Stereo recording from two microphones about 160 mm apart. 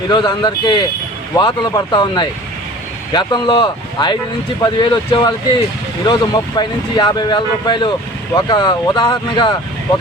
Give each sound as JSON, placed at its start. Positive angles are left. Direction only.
{"t": 0.1, "sound": "speech", "side_deg": 25}